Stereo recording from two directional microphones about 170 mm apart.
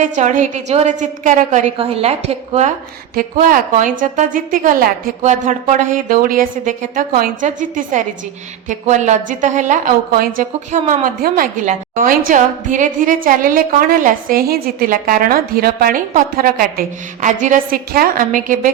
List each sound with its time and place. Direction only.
0.0 s a woman's voice: 45° right (ahead or behind)
3.2 s a woman's voice: 55° right (ahead or behind)